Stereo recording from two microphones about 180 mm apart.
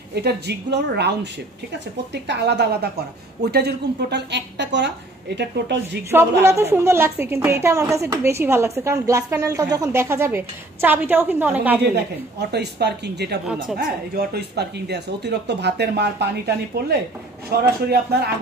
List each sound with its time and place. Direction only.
0.1 s speech: 65° right (ahead or behind)
6.4 s a woman's voice: 15° right (ahead or behind)
11.9 s a man's voice: 65° right (ahead or behind)